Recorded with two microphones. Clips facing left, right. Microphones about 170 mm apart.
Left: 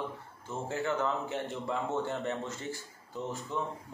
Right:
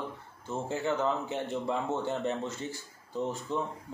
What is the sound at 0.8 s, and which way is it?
Speech, 20° right (ahead or behind).